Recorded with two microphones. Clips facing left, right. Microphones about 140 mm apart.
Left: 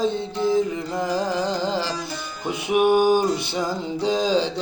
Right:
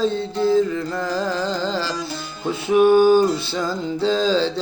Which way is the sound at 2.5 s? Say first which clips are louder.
Right 4 dB; 20° left (ahead or behind).